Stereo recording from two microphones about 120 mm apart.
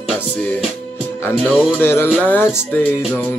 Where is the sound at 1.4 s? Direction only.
5° right (ahead or behind).